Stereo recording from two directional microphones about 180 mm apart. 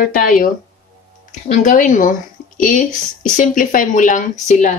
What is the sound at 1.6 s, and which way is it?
Speech, 45° left (ahead or behind).